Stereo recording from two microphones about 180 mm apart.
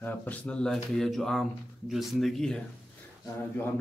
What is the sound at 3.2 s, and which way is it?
Mantra, 10° left (ahead or behind).